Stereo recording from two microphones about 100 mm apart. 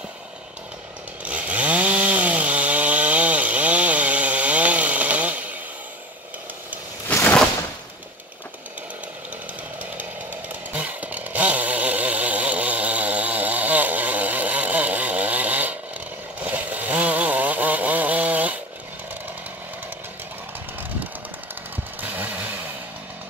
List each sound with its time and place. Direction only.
1.2 s chainsaw: 15° right (ahead or behind)
10.7 s chainsaw: 15° right (ahead or behind)
16.4 s vehicle: 15° right (ahead or behind)
22.0 s chainsaw: 15° right (ahead or behind)